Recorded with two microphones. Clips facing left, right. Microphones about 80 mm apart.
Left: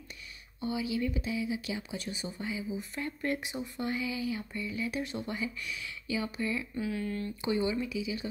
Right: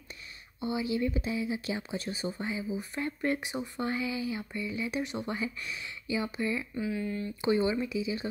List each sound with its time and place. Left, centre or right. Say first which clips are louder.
0.6 s speech: right 2 dB; right
6.8 s speech: right 1 dB; centre
7.4 s speech: right 3 dB; right